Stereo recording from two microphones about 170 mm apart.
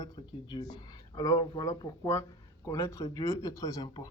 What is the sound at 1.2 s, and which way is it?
Speech, 20° left (ahead or behind).